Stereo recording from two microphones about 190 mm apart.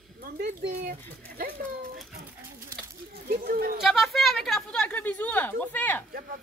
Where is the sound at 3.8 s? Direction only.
Centre (ahead or behind).